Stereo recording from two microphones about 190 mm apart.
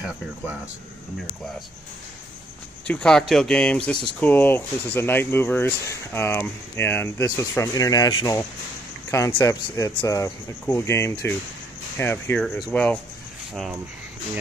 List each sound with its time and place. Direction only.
0.0 s speech: 5° right (ahead or behind)
2.9 s speech: 5° left (ahead or behind)